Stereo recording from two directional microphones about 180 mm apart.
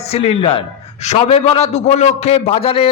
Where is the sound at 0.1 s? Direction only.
35° left (ahead or behind).